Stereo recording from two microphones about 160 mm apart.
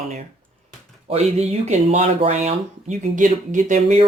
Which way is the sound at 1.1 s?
40° right (ahead or behind).